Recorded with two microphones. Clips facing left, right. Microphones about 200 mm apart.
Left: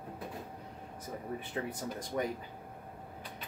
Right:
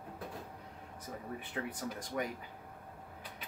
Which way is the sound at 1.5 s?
25° left (ahead or behind).